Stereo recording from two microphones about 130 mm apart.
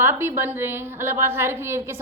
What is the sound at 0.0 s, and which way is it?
A woman's voice, 15° right (ahead or behind).